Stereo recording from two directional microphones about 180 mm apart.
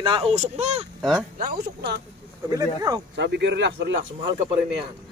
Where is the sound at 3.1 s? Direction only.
70° right (ahead or behind).